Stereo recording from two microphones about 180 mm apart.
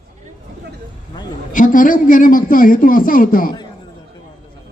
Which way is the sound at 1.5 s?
50° left (ahead or behind).